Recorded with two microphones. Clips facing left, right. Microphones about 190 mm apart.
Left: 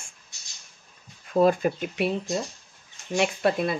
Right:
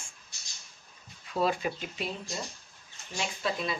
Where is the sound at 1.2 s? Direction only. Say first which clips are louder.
Left 9 dB; 50° left (ahead or behind).